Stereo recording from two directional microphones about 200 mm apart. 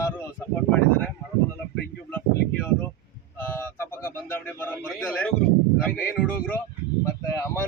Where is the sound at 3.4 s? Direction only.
10° left (ahead or behind).